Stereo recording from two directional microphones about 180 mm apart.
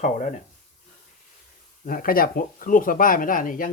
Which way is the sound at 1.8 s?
50° left (ahead or behind).